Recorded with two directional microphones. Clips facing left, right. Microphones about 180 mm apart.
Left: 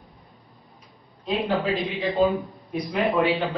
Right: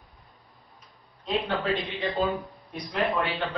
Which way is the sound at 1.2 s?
Centre (ahead or behind).